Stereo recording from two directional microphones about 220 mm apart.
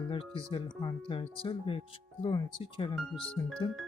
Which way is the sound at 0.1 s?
25° left (ahead or behind).